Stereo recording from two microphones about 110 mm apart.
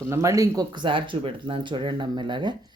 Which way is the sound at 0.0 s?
30° right (ahead or behind).